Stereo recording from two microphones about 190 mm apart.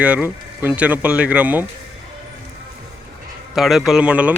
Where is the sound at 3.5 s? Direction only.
Centre (ahead or behind).